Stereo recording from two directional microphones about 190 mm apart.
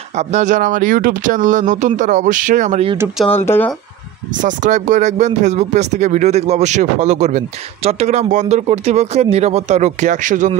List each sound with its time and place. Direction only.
0.1 s speech: 35° right (ahead or behind)
3.3 s speech: 10° left (ahead or behind)
4.4 s speech: 40° right (ahead or behind)